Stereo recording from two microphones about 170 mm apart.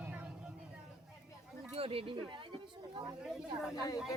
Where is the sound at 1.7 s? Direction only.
35° right (ahead or behind).